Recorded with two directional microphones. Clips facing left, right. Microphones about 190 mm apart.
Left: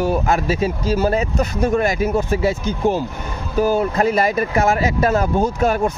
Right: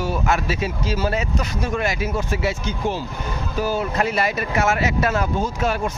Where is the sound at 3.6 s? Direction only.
45° left (ahead or behind).